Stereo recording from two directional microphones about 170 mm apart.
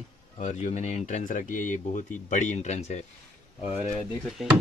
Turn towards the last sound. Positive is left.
turn(degrees=0)  # may be behind; listen again after turning